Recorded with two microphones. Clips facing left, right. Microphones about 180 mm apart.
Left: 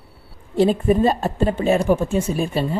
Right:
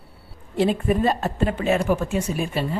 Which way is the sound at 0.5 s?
30° left (ahead or behind).